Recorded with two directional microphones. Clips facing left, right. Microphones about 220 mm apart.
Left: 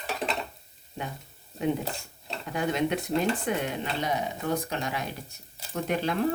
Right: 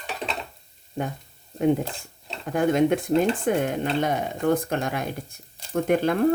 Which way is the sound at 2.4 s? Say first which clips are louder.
Right 7 dB; 50° right (ahead or behind).